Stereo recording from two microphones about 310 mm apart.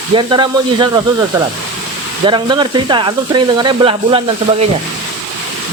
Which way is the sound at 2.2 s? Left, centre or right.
Centre.